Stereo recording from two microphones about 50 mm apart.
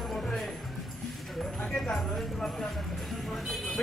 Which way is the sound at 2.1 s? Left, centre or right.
Centre.